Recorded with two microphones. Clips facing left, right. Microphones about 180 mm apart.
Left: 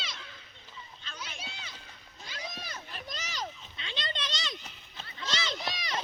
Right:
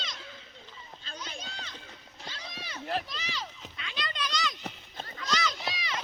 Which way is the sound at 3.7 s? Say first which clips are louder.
Even; 25° left (ahead or behind).